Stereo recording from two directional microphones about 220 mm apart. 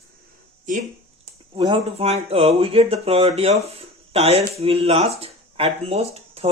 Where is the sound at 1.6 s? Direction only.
25° right (ahead or behind).